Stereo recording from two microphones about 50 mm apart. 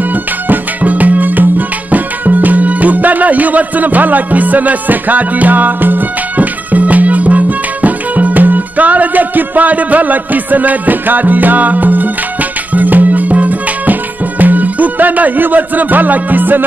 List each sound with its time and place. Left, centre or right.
0.1 s music: right